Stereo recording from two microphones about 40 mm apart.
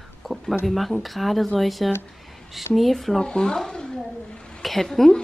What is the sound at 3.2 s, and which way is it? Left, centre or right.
Speech, centre.